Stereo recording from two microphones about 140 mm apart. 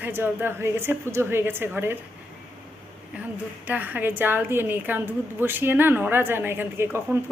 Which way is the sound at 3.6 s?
10° right (ahead or behind).